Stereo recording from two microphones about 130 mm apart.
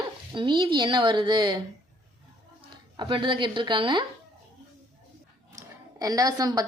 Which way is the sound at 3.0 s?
40° right (ahead or behind).